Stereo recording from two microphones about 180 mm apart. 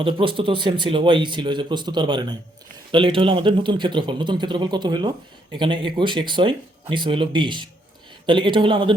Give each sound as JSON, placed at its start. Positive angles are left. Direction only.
{"t": 0.0, "sound": "speech", "side_deg": -30}